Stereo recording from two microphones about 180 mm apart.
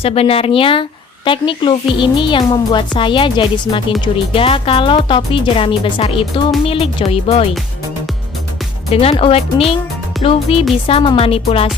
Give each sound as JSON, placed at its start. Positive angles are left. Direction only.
{"t": 0.0, "sound": "a woman's voice", "side_deg": 35}
{"t": 8.9, "sound": "a woman's voice", "side_deg": 35}